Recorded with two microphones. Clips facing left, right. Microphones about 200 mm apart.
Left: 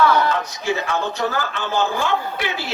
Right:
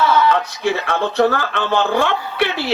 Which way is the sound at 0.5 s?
60° right (ahead or behind).